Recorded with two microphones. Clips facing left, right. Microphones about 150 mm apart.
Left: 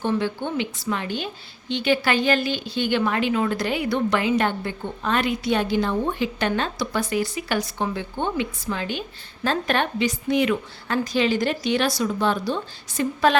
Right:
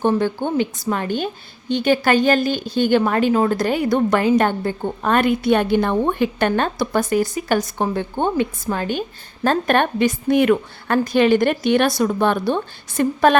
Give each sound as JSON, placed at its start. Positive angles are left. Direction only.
{"t": 0.0, "sound": "a woman's voice", "side_deg": -45}